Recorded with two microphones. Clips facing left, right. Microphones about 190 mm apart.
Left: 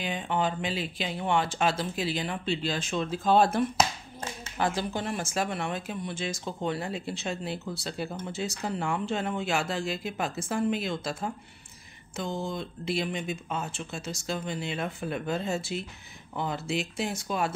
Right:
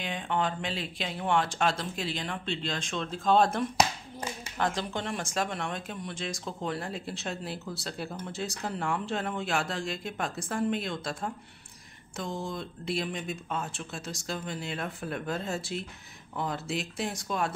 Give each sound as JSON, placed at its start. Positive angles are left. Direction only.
{"t": 0.0, "sound": "speech", "side_deg": 5}